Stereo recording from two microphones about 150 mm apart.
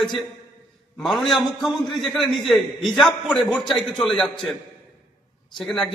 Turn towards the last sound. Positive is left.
turn(degrees=5)  # may be behind; listen again after turning